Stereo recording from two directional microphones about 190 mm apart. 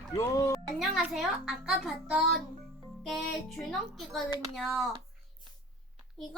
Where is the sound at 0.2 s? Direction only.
15° left (ahead or behind).